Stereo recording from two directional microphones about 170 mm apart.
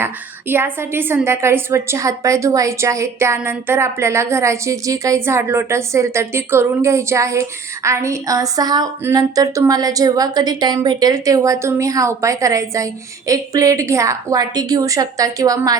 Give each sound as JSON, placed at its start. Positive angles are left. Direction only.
{"t": 0.0, "sound": "a woman's voice", "side_deg": -15}